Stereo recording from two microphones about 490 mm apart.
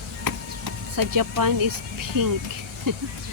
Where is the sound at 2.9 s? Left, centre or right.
Right.